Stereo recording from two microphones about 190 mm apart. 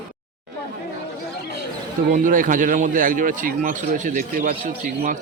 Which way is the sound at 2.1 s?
45° right (ahead or behind).